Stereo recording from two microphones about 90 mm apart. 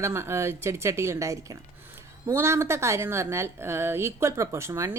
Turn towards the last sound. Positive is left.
turn(degrees=-30)  # may be behind; listen again after turning